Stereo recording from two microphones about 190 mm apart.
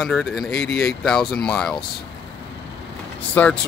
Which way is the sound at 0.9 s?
Centre (ahead or behind).